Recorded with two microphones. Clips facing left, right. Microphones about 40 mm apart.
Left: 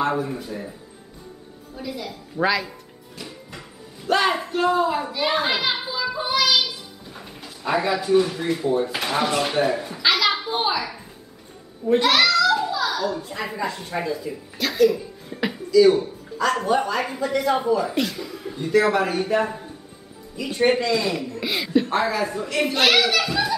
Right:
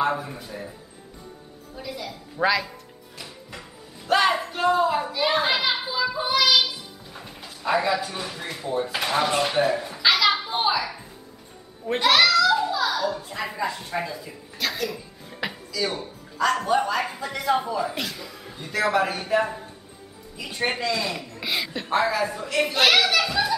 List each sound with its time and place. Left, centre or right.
0.0 s speech: centre
1.8 s a sound: centre
4.1 s children playing: centre
12.0 s a child's voice: centre